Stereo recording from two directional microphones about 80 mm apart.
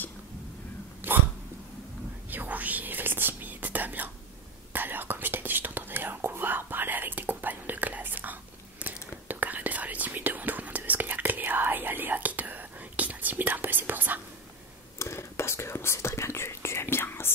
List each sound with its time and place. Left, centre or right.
1.0 s a sound: right
2.3 s whispering: right
15.0 s whispering: left